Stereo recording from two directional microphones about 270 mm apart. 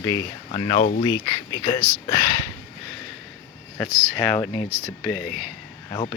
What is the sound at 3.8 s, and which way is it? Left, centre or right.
Speech, centre.